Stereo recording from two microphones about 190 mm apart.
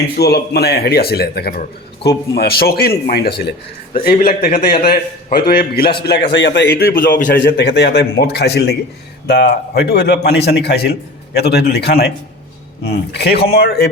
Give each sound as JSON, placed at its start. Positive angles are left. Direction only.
{"t": 0.2, "sound": "a man's voice", "side_deg": 60}
{"t": 7.4, "sound": "a man's voice", "side_deg": 60}